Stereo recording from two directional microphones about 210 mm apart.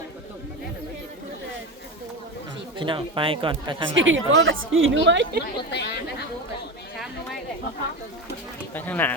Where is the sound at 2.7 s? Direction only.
25° right (ahead or behind).